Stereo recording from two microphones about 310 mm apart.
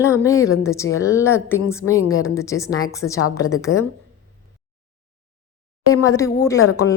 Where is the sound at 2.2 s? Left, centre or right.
Centre.